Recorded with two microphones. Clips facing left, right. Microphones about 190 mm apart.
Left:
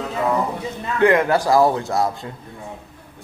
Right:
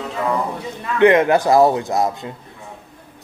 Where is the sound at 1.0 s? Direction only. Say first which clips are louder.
Right 3 dB; 20° right (ahead or behind).